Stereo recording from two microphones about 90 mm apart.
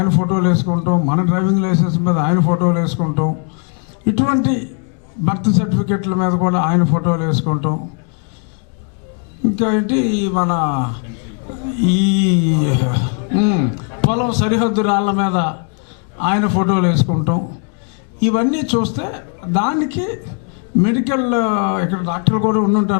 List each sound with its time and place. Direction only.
0.0 s a man's voice: 15° left (ahead or behind)
9.6 s a man's voice: 15° left (ahead or behind)